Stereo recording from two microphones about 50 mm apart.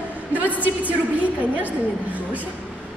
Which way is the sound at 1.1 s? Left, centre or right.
Right.